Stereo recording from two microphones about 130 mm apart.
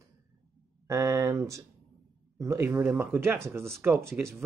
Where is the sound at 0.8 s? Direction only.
25° right (ahead or behind).